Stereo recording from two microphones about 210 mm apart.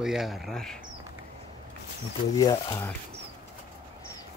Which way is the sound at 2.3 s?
15° left (ahead or behind).